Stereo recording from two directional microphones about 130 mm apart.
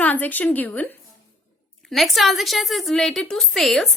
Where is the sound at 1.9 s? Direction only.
Centre (ahead or behind).